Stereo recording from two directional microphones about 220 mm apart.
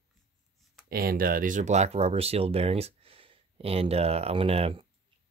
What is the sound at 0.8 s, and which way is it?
Speech, 40° right (ahead or behind).